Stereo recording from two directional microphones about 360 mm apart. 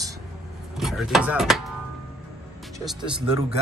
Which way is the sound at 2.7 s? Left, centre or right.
Centre.